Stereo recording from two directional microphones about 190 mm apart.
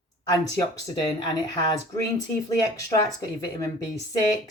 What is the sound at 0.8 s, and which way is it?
Speech, 20° left (ahead or behind).